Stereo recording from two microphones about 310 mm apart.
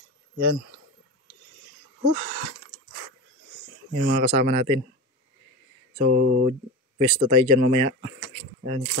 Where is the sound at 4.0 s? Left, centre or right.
Right.